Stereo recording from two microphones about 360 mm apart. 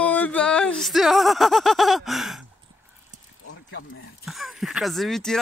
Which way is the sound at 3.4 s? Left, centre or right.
Left.